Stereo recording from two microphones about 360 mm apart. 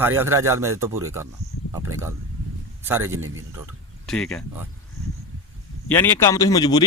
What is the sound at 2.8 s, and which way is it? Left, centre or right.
Speech, centre.